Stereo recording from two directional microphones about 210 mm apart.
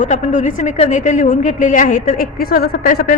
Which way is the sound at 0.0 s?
35° left (ahead or behind).